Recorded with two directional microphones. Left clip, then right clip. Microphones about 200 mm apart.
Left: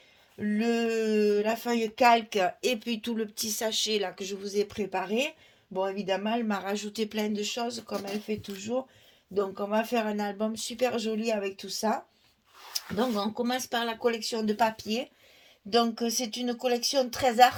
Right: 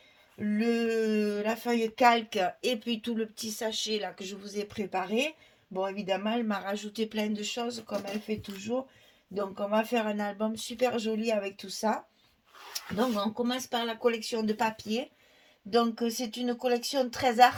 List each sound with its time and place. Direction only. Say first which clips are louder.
0.3 s speech: left 1 dB; 35° left (ahead or behind)
13.0 s speech: even; 35° left (ahead or behind)